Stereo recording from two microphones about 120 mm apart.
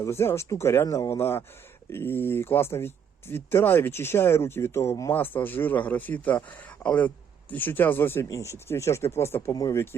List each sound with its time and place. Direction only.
0.0 s speech: 20° left (ahead or behind)